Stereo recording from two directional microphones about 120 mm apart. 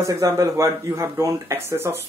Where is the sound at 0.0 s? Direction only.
30° right (ahead or behind).